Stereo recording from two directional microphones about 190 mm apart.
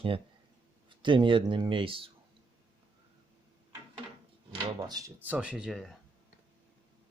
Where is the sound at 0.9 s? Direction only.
25° right (ahead or behind).